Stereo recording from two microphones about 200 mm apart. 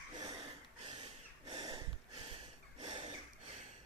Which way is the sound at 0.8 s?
25° right (ahead or behind).